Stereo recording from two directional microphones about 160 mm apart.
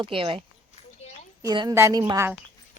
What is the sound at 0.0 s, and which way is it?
A woman's voice, 30° right (ahead or behind).